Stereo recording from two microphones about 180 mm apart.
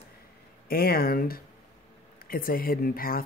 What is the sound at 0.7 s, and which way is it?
Speech, 55° left (ahead or behind).